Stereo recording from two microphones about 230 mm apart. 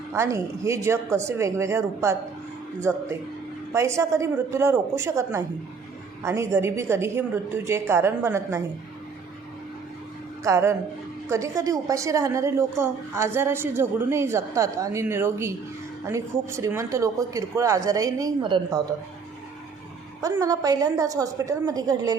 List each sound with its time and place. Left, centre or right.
0.1 s a woman's voice: centre
10.4 s a woman's voice: centre
20.2 s a woman's voice: centre